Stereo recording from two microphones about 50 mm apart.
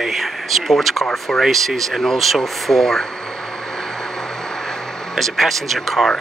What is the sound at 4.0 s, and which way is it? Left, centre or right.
Vehicle, centre.